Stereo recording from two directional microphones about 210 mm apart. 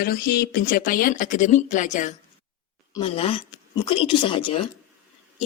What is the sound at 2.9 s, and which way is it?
Speech, 25° left (ahead or behind).